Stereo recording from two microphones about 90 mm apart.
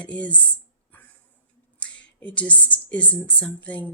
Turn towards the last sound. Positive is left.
turn(degrees=15)  # may be behind; listen again after turning